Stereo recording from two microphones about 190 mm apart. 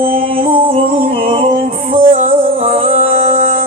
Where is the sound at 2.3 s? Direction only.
30° right (ahead or behind).